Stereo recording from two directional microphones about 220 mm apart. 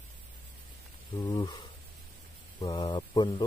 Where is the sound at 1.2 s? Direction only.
20° left (ahead or behind).